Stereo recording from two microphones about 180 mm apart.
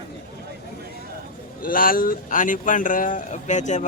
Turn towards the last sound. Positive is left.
turn(degrees=40)  # may be behind; listen again after turning